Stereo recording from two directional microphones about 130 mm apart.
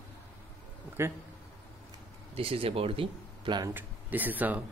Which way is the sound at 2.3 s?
45° right (ahead or behind).